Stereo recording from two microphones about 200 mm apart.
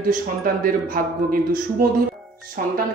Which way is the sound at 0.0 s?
45° right (ahead or behind).